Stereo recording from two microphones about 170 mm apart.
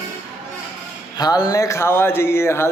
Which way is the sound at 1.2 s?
20° left (ahead or behind).